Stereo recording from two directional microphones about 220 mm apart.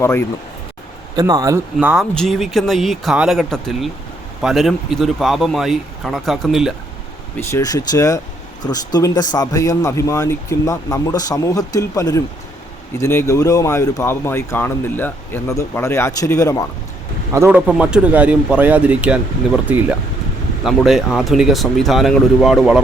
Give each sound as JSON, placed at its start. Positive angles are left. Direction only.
{"t": 0.0, "sound": "speech", "side_deg": 10}
{"t": 1.1, "sound": "speech", "side_deg": -15}
{"t": 7.3, "sound": "speech", "side_deg": 15}
{"t": 17.3, "sound": "speech", "side_deg": -10}